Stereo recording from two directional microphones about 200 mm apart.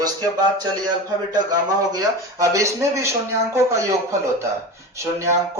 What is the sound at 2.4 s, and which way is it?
Speech, 15° right (ahead or behind).